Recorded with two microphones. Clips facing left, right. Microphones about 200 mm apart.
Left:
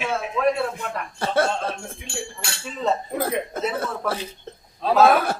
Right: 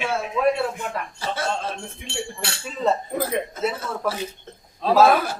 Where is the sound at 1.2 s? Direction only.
60° left (ahead or behind).